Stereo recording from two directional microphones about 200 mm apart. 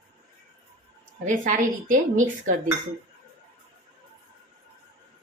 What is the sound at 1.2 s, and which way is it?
A woman's voice, 40° right (ahead or behind).